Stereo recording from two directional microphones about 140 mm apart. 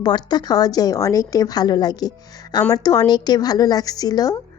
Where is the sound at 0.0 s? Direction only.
30° left (ahead or behind).